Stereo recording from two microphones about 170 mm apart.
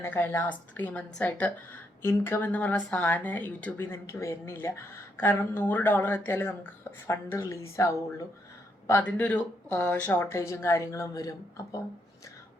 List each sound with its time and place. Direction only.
0.0 s speech: 10° left (ahead or behind)